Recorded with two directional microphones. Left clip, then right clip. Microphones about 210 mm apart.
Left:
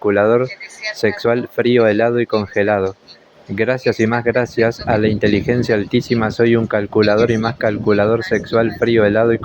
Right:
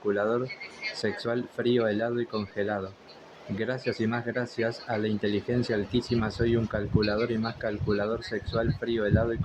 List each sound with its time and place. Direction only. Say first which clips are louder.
0.0 s speech: left 14 dB; 30° left (ahead or behind)